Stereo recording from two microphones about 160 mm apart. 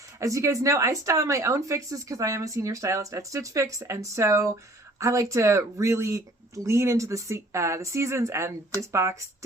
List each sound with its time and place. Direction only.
0.2 s a woman's voice: 20° right (ahead or behind)